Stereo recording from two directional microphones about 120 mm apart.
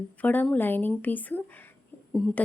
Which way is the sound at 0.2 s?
15° left (ahead or behind).